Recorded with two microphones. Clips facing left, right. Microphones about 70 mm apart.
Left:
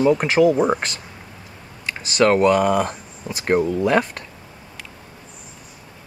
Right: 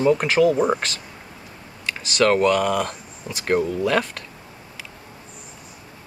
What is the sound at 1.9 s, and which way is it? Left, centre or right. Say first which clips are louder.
Speech: left 2 dB; centre.